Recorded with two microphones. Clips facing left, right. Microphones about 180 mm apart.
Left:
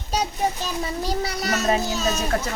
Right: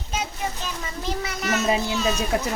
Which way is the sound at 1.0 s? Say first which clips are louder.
Right 1 dB; 35° left (ahead or behind).